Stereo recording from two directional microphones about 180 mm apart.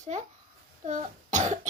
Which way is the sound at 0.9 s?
45° right (ahead or behind).